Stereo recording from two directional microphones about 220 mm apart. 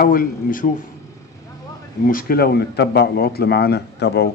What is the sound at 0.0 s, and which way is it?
Speech, 40° left (ahead or behind).